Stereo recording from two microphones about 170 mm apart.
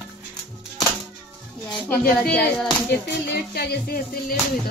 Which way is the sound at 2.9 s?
65° left (ahead or behind).